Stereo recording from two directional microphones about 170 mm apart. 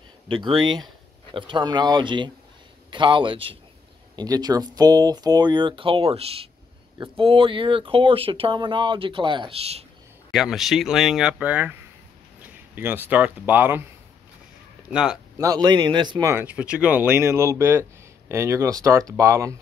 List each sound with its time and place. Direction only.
0.6 s speech: 25° right (ahead or behind)
10.3 s speech: centre (ahead or behind)
12.7 s speech: 10° right (ahead or behind)
14.9 s speech: 5° right (ahead or behind)
15.3 s speech: 20° right (ahead or behind)